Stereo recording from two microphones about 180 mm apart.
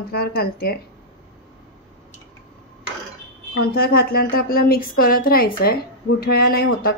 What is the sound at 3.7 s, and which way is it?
A woman's voice, 60° left (ahead or behind).